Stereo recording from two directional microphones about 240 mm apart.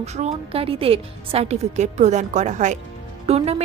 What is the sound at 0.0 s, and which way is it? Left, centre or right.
Speech, right.